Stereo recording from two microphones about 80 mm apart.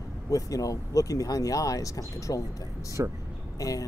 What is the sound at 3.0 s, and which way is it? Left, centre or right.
Speech, right.